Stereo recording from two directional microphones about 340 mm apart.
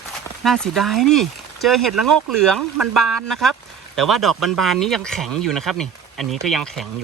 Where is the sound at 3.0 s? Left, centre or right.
Right.